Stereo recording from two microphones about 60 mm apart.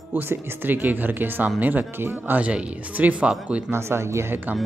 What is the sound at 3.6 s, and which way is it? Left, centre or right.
Speech, right.